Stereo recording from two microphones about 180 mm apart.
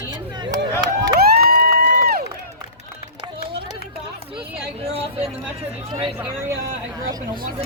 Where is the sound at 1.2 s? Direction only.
60° right (ahead or behind).